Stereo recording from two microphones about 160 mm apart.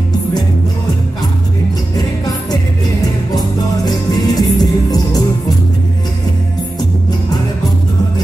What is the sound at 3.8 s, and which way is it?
Music, 25° left (ahead or behind).